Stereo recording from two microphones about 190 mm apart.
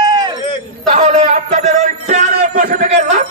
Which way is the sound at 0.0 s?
20° right (ahead or behind).